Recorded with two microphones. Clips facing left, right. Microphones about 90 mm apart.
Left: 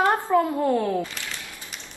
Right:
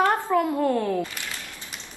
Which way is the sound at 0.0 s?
20° left (ahead or behind).